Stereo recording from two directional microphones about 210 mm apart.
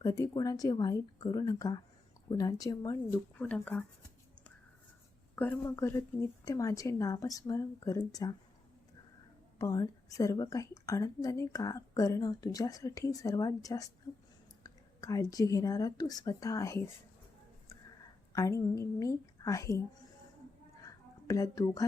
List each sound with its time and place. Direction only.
0.0 s a woman's voice: 15° left (ahead or behind)
5.4 s a woman's voice: 10° left (ahead or behind)
9.6 s a woman's voice: 15° left (ahead or behind)
18.3 s a woman's voice: 15° left (ahead or behind)
20.8 s a sound: 15° left (ahead or behind)